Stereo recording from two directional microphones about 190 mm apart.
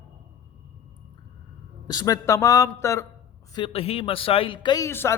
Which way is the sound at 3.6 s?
30° left (ahead or behind).